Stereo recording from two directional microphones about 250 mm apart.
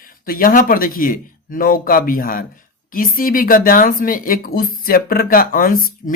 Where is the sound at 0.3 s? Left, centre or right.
Left.